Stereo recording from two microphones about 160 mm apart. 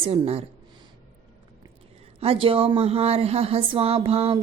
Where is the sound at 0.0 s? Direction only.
40° right (ahead or behind).